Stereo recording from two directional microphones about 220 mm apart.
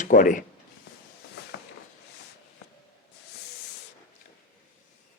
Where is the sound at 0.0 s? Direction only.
35° left (ahead or behind).